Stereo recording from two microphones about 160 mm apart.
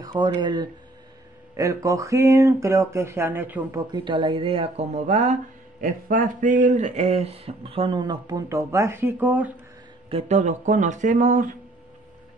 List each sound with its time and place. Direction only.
0.0 s speech: 25° right (ahead or behind); by 3.8 s 10° right (ahead or behind)
3.9 s speech: 30° right (ahead or behind); by 9.5 s 10° right (ahead or behind)
10.0 s speech: 40° right (ahead or behind)